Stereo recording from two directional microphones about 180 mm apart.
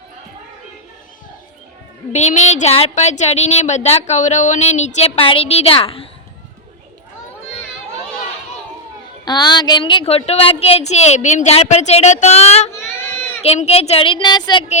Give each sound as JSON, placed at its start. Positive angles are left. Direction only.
{"t": 2.1, "sound": "speech", "side_deg": 40}
{"t": 9.2, "sound": "speech", "side_deg": 25}
{"t": 12.7, "sound": "child singing", "side_deg": 10}
{"t": 13.4, "sound": "speech", "side_deg": 35}